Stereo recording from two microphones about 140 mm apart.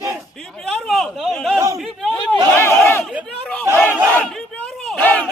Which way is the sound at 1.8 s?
Centre (ahead or behind).